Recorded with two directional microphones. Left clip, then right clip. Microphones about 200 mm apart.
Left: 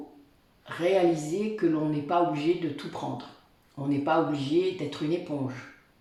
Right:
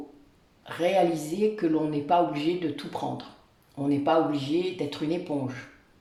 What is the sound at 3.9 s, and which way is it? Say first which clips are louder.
Speech: right 2 dB; 40° right (ahead or behind).